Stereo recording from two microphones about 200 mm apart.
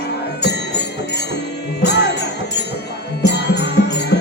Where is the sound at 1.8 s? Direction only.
55° left (ahead or behind).